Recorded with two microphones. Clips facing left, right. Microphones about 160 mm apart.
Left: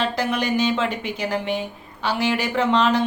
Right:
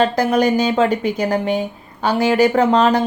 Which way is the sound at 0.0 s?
40° right (ahead or behind).